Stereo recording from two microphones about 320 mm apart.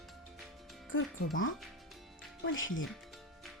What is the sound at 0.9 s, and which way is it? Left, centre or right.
Speech, left.